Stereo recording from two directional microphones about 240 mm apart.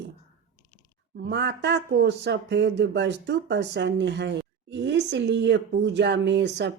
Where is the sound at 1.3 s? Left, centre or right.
Right.